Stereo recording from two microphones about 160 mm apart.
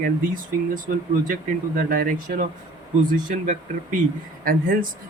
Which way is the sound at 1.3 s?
65° right (ahead or behind).